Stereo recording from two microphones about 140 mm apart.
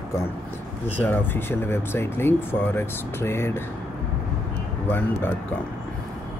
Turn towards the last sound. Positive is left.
turn(degrees=15)  # may be behind; listen again after turning